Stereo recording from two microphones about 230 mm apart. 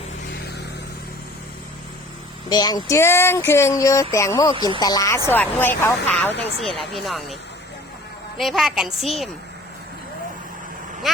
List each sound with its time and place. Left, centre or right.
2.5 s a woman's voice: centre
8.4 s a woman's voice: centre
11.1 s speech: centre